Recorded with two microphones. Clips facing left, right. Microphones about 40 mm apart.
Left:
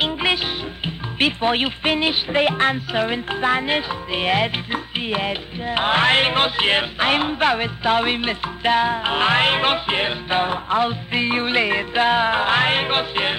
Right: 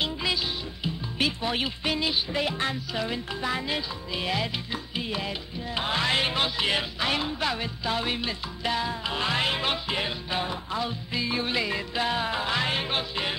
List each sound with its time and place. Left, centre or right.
0.0 s music: left
0.8 s speech: left